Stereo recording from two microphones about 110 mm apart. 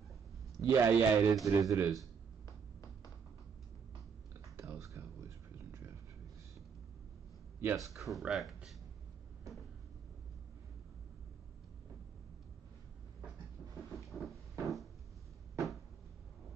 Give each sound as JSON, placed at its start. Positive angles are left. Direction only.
{"t": 0.6, "sound": "a man's voice", "side_deg": -25}
{"t": 1.4, "sound": "a man's voice", "side_deg": -30}
{"t": 4.6, "sound": "a sound", "side_deg": -30}
{"t": 7.6, "sound": "a man's voice", "side_deg": -30}
{"t": 8.0, "sound": "speech", "side_deg": 0}
{"t": 13.9, "sound": "cupboard open or close", "side_deg": 0}
{"t": 14.6, "sound": "a sound", "side_deg": 0}